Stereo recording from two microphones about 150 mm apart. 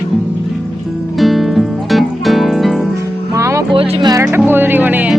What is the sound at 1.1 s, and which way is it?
Music, centre (ahead or behind).